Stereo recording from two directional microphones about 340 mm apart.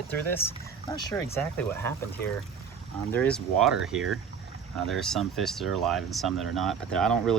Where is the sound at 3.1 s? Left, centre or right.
Centre.